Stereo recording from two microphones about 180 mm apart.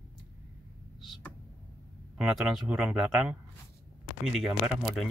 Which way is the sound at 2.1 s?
5° right (ahead or behind).